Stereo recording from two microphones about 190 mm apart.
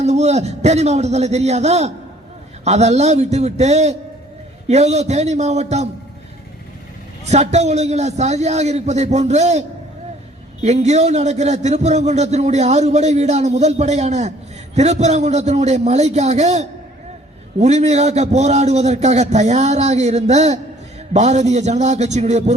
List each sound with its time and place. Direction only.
0.0 s a man's voice: 35° right (ahead or behind)
7.3 s a man's voice: 35° right (ahead or behind)